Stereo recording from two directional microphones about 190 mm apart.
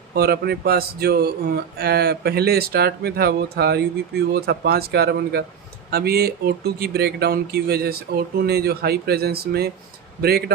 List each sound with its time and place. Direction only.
0.1 s speech: 55° right (ahead or behind)